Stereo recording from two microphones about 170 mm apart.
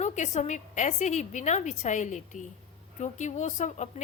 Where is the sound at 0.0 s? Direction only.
45° left (ahead or behind).